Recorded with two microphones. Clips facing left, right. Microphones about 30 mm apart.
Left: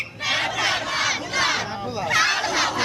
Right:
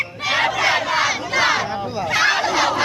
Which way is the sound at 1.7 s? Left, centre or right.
Centre.